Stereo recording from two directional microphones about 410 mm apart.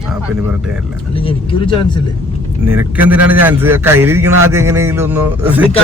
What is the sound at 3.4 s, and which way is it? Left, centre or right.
Speech, centre.